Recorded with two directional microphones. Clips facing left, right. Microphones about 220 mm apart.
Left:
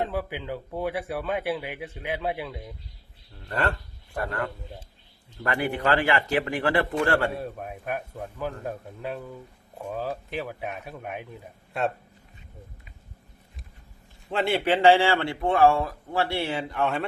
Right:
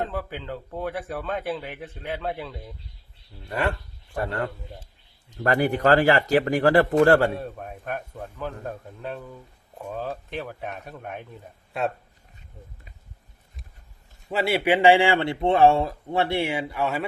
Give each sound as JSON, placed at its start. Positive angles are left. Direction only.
{"t": 0.0, "sound": "a man's voice", "side_deg": 10}
{"t": 3.4, "sound": "speech", "side_deg": -10}
{"t": 4.2, "sound": "a man's voice", "side_deg": -30}
{"t": 5.4, "sound": "speech", "side_deg": -40}
{"t": 7.3, "sound": "a man's voice", "side_deg": 5}
{"t": 14.3, "sound": "speech", "side_deg": -5}